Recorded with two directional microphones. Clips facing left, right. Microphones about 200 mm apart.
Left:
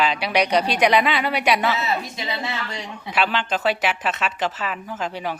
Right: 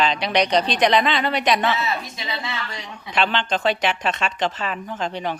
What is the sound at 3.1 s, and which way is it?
Speech, 5° left (ahead or behind).